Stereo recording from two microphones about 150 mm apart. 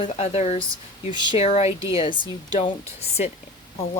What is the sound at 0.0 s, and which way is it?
Speech, 45° left (ahead or behind).